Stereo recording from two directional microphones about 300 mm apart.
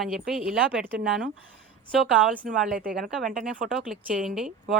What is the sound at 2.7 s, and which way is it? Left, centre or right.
Speech, right.